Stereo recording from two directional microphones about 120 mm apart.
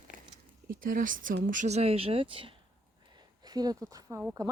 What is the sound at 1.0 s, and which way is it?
Speech, 90° right.